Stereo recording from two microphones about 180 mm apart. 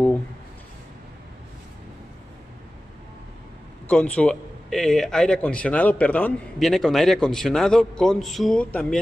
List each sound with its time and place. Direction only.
3.8 s a man's voice: 5° left (ahead or behind)